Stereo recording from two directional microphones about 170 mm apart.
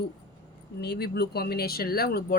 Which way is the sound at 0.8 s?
70° left (ahead or behind).